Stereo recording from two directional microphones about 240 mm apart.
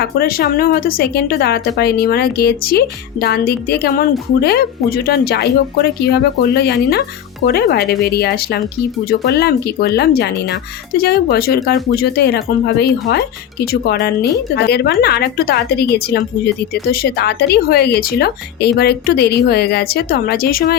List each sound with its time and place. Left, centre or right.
0.0 s speech: left